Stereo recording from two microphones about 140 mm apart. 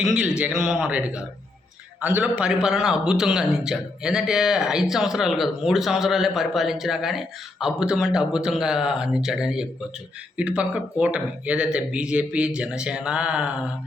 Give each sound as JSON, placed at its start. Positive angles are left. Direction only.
{"t": 0.0, "sound": "a man's voice", "side_deg": -5}